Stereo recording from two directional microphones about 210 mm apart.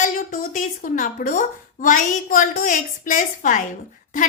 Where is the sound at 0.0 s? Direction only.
40° left (ahead or behind).